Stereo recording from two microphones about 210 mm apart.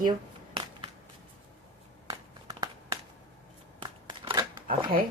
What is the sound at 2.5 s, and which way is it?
Crumpling, 20° right (ahead or behind).